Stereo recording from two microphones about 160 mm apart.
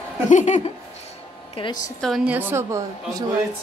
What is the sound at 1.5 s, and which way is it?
Speech, 30° left (ahead or behind).